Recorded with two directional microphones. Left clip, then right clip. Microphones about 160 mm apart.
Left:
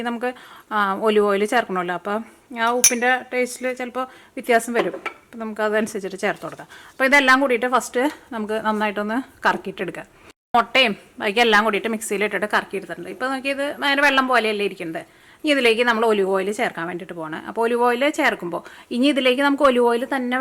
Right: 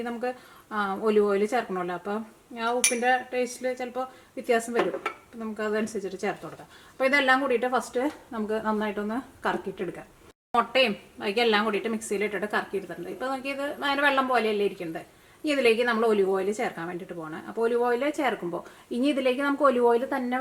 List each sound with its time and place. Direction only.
0.0 s a woman's voice: 30° left (ahead or behind)
10.5 s a woman's voice: 20° left (ahead or behind)